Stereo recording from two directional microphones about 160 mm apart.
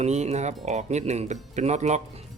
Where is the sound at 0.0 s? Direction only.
45° right (ahead or behind).